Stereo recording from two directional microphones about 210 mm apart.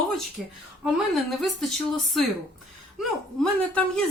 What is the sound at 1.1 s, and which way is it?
Speech, centre (ahead or behind).